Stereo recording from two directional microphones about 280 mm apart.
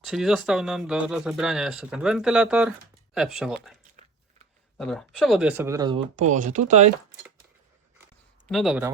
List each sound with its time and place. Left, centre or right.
0.0 s speech: centre
4.8 s speech: centre
6.3 s speech: right
8.4 s speech: centre